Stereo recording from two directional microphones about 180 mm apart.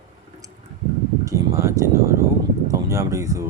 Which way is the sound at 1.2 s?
15° right (ahead or behind).